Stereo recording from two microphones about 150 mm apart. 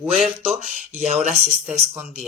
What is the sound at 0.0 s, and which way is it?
Speech, 5° right (ahead or behind).